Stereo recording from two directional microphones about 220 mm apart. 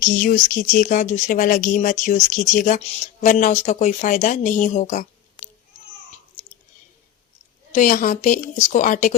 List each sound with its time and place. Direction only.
0.0 s speech: 40° left (ahead or behind)
7.7 s speech: 35° left (ahead or behind)